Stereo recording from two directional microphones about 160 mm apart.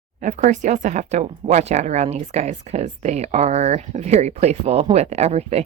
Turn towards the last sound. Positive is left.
turn(degrees=-40)  # may be behind; listen again after turning